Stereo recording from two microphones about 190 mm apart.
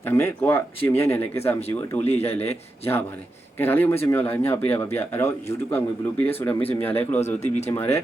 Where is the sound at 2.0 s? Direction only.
35° left (ahead or behind).